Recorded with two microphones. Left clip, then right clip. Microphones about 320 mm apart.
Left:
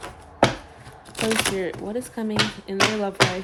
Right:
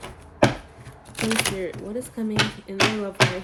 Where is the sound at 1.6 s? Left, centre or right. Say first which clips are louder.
Left 2 dB; left.